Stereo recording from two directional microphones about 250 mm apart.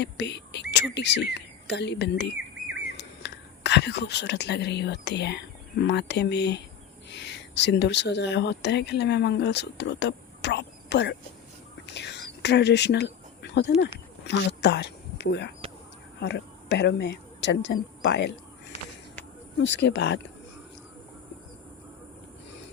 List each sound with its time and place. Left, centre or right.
0.0 s a woman's voice: left
19.5 s speech: left